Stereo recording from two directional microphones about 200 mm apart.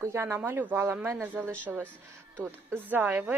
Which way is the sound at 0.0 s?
10° right (ahead or behind).